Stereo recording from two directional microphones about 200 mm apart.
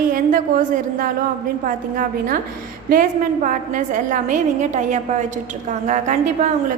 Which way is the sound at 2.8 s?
40° right (ahead or behind).